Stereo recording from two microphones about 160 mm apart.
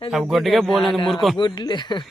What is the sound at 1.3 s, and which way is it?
Speech, 25° left (ahead or behind).